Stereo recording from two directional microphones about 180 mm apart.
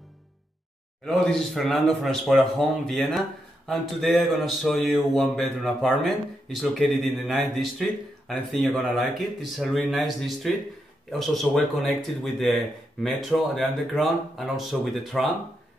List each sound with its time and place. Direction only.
1.0 s a man's voice: centre (ahead or behind)